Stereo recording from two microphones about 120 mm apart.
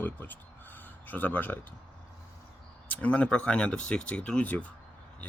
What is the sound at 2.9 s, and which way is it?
Speech, 10° left (ahead or behind).